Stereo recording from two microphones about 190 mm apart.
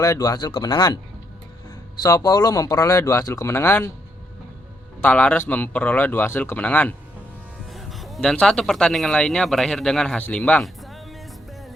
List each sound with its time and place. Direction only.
0.0 s speech: 20° left (ahead or behind)
2.0 s speech: 20° left (ahead or behind)
5.0 s speech: 5° left (ahead or behind)